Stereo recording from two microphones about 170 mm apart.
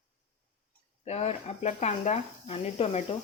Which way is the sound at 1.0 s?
40° left (ahead or behind).